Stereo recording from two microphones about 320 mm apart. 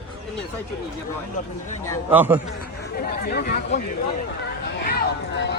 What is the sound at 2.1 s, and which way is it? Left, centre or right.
Speech, centre.